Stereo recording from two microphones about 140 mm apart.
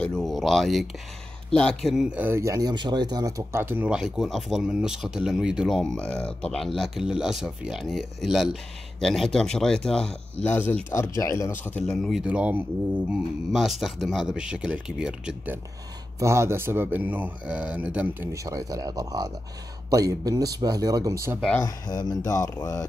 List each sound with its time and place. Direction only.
0.0 s a sound: 5° left (ahead or behind)
1.5 s speech: 5° left (ahead or behind)
11.8 s speech: centre (ahead or behind)
16.2 s speech: 20° right (ahead or behind)
21.8 s speech: 30° left (ahead or behind)